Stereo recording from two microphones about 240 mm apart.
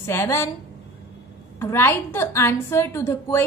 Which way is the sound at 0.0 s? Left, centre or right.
Centre.